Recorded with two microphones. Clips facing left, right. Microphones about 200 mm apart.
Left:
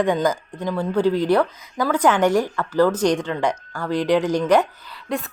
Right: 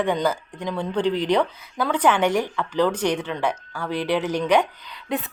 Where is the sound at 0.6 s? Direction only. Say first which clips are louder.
Left 3 dB; 5° left (ahead or behind).